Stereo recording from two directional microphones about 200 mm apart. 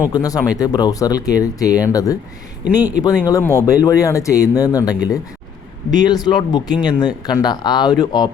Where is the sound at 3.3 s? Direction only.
15° left (ahead or behind).